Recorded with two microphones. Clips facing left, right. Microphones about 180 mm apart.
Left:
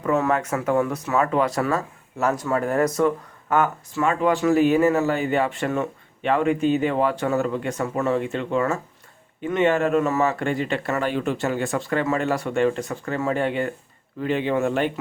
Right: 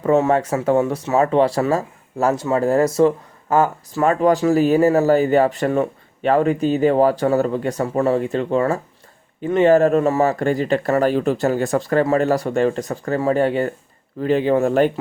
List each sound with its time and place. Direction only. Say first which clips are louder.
0.0 s speech: right 5 dB; 30° right (ahead or behind)